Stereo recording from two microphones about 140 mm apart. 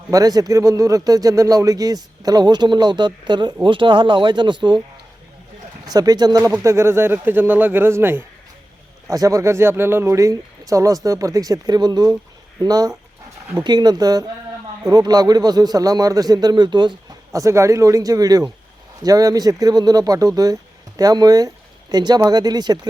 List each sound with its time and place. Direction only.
0.1 s speech: 25° right (ahead or behind)
5.9 s speech: 25° right (ahead or behind)
17.3 s speech: 20° right (ahead or behind)